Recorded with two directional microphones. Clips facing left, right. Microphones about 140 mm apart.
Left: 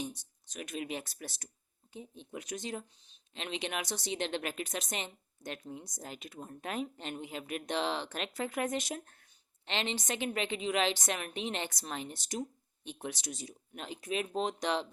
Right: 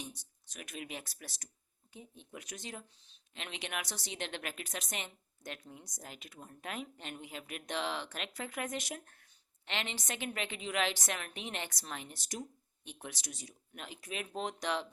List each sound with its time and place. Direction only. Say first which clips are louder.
0.0 s speech: left 7 dB; 25° left (ahead or behind)